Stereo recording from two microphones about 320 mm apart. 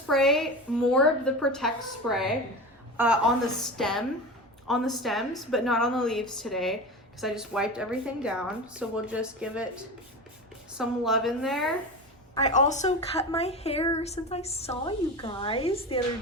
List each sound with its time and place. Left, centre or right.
0.1 s a woman's voice: centre
12.3 s a woman's voice: left